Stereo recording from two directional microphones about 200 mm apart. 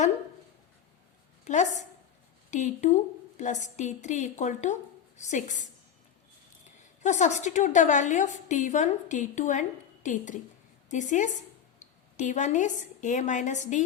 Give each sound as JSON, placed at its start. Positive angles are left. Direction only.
{"t": 1.5, "sound": "a woman's voice", "side_deg": 35}
{"t": 7.0, "sound": "a woman's voice", "side_deg": 35}